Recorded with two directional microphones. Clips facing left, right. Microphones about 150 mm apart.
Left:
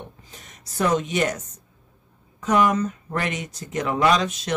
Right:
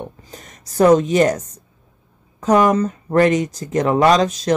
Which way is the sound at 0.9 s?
35° right (ahead or behind).